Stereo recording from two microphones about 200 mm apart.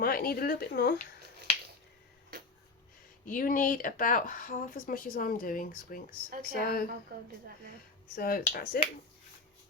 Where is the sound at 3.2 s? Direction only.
45° left (ahead or behind).